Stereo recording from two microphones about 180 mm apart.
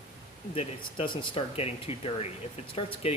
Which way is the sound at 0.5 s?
30° left (ahead or behind).